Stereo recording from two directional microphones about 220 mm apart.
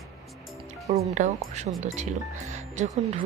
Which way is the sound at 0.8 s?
30° right (ahead or behind).